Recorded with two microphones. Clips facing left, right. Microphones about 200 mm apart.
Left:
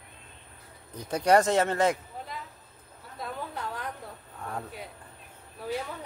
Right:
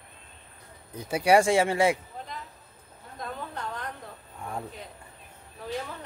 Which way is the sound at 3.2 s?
5° left (ahead or behind).